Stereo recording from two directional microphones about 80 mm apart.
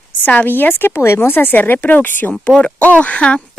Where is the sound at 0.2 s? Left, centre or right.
Centre.